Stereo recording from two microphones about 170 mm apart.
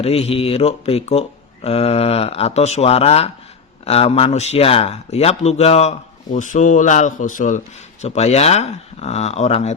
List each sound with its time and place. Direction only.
0.0 s speech: 35° left (ahead or behind)